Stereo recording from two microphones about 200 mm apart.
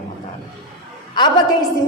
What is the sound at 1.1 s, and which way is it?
Speech, 20° left (ahead or behind).